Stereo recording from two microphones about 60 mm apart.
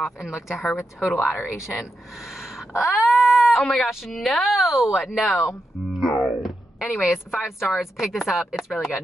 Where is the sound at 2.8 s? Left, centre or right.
Centre.